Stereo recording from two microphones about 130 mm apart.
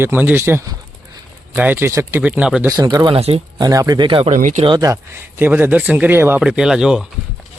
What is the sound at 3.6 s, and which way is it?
Speech, 30° right (ahead or behind).